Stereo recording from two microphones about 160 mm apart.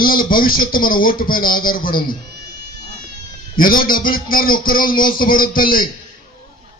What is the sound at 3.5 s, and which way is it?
A man's voice, 60° left (ahead or behind).